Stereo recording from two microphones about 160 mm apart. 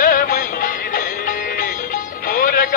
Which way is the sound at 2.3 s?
65° left (ahead or behind).